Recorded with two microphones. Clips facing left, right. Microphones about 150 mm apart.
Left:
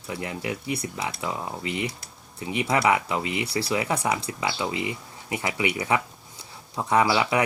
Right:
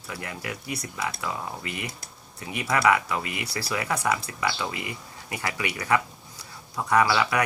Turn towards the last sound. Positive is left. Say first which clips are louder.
# left 1 dB
turn(degrees=20)  # may be behind; listen again after turning